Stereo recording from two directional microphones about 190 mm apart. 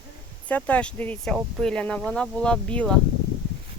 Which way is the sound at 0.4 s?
5° left (ahead or behind).